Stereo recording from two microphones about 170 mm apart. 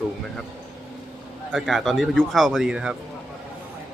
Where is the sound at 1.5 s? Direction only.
Centre (ahead or behind).